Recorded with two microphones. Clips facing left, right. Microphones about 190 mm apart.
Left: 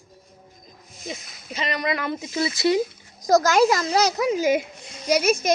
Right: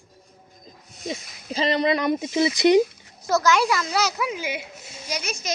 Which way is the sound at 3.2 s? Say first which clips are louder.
Left 4 dB; 40° left (ahead or behind).